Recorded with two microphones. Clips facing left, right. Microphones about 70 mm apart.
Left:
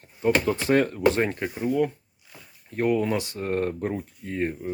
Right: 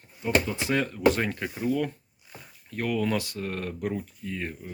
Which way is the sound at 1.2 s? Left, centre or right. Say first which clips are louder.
Left 4 dB; left.